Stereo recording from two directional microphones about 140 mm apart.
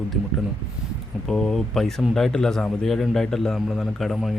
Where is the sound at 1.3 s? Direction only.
5° left (ahead or behind).